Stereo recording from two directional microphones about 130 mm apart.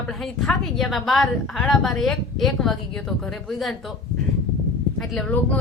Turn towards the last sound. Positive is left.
turn(degrees=10)  # may be behind; listen again after turning